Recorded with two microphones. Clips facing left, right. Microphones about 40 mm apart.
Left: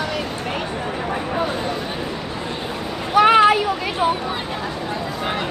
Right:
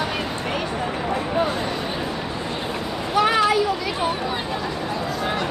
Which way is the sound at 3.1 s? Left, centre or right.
Left.